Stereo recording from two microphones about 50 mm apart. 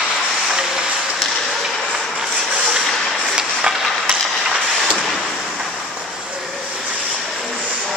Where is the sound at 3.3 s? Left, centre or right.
Centre.